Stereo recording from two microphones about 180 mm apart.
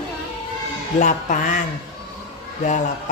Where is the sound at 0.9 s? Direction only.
45° left (ahead or behind).